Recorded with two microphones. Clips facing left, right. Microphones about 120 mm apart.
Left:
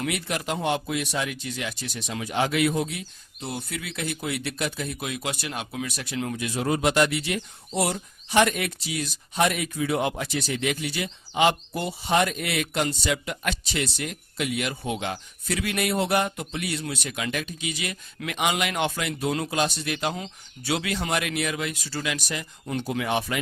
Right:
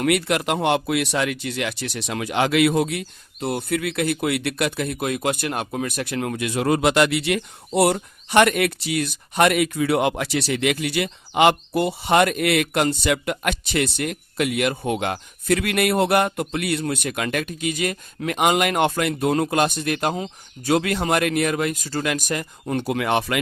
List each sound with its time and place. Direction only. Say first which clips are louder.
0.0 s speech: right 8 dB; 70° right (ahead or behind); by 22.8 s 50° right (ahead or behind)
22.8 s speech: right 4 dB; 65° right (ahead or behind)